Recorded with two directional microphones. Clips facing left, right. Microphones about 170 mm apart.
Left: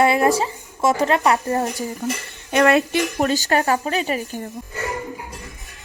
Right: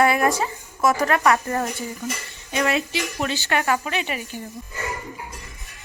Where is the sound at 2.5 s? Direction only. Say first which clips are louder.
Left 7 dB; 60° left (ahead or behind).